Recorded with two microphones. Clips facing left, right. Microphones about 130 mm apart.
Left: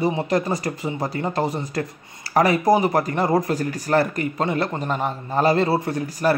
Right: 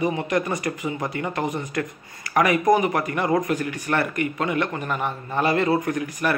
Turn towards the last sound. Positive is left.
turn(degrees=35)  # may be behind; listen again after turning